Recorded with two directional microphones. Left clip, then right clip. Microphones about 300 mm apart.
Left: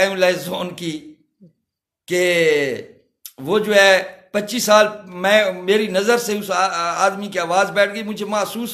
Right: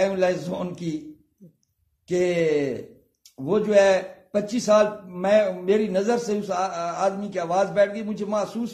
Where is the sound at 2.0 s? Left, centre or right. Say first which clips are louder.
Left 6 dB; centre.